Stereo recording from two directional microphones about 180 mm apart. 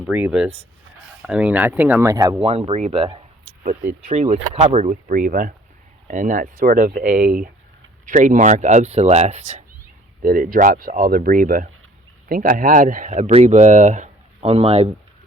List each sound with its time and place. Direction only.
0.0 s speech: 5° right (ahead or behind); by 9.6 s 40° right (ahead or behind)
10.2 s speech: 50° right (ahead or behind); by 14.9 s 35° right (ahead or behind)